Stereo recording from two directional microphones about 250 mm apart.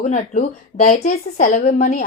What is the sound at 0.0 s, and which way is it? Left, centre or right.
A woman's voice, left.